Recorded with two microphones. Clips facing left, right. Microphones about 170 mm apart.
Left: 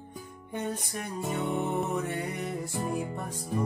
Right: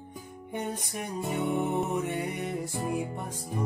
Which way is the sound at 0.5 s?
15° right (ahead or behind).